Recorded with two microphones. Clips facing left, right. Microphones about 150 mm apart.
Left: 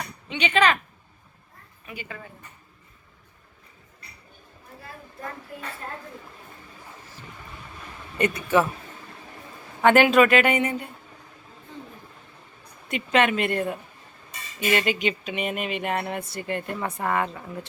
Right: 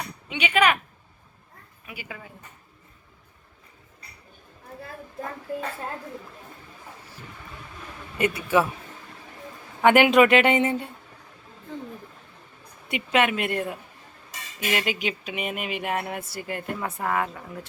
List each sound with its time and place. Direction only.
0.3 s speech: 10° right (ahead or behind)
1.9 s speech: 5° right (ahead or behind)
8.2 s speech: 10° right (ahead or behind)
9.8 s speech: 15° right (ahead or behind)
12.9 s speech: 5° right (ahead or behind)